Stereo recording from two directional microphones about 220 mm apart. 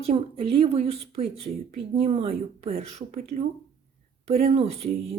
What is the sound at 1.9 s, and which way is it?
Speech, 25° right (ahead or behind).